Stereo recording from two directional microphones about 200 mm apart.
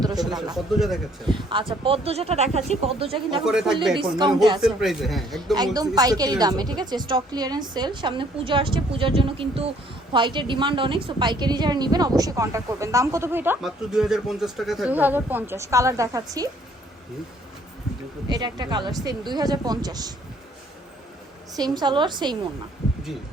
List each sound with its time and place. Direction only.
0.0 s a man's voice: 20° right (ahead or behind)
0.5 s speech: centre (ahead or behind)
1.3 s a woman's voice: 25° right (ahead or behind)
3.4 s speech: centre (ahead or behind)
5.5 s a woman's voice: 20° right (ahead or behind)
18.3 s a woman's voice: 20° right (ahead or behind)
21.5 s a woman's voice: 20° right (ahead or behind)